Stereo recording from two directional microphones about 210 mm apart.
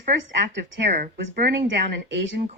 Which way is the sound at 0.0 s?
55° right (ahead or behind).